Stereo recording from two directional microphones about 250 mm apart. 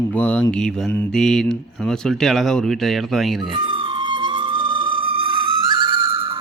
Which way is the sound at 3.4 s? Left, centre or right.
Centre.